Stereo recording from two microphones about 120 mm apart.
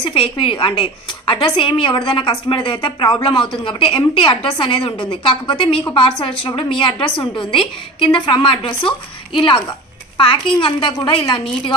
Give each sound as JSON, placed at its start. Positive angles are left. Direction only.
{"t": 0.0, "sound": "speech", "side_deg": 50}
{"t": 10.1, "sound": "a child's voice", "side_deg": 45}